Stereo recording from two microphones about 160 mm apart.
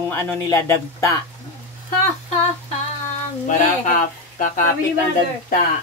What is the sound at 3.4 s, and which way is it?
Speech, 55° left (ahead or behind).